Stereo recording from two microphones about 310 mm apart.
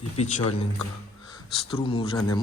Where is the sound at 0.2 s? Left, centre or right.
Centre.